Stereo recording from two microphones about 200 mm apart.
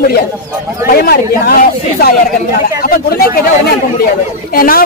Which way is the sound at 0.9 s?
50° left (ahead or behind).